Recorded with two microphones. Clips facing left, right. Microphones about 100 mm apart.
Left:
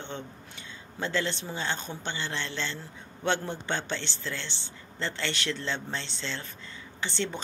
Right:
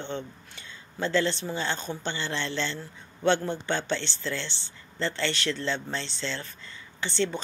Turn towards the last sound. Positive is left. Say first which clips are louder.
# right 4 dB
turn(degrees=15)  # may be behind; listen again after turning